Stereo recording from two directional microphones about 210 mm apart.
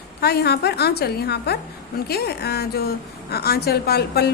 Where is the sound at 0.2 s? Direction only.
50° left (ahead or behind).